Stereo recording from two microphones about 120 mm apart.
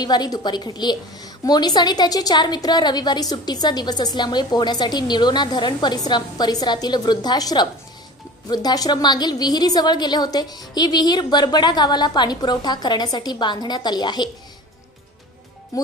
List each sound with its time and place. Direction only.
0.0 s a woman's voice: 35° left (ahead or behind)
15.7 s speech: 30° left (ahead or behind)